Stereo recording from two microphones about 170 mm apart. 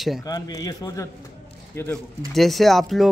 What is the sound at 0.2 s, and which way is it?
A man's voice, 20° left (ahead or behind).